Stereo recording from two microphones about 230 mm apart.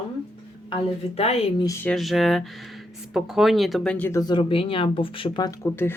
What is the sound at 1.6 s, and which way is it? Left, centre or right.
Speech, centre.